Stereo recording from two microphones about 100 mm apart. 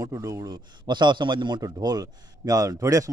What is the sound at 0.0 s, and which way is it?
A man's voice, 30° right (ahead or behind).